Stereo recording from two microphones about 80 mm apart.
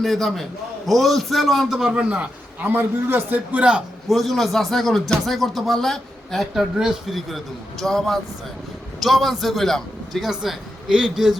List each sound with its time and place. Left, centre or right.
0.0 s speech: centre
2.0 s a man's voice: centre
4.1 s speech: centre